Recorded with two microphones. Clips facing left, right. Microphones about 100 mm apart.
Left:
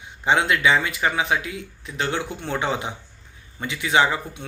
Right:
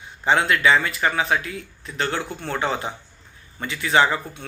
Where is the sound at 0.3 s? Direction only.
15° left (ahead or behind).